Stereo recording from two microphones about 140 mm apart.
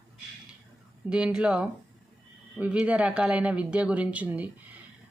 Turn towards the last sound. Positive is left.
turn(degrees=-10)  # may be behind; listen again after turning